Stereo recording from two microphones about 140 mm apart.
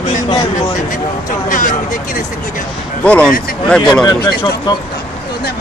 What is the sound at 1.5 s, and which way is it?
Speech, 70° left (ahead or behind).